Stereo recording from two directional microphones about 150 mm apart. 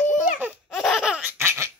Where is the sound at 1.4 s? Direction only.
15° right (ahead or behind).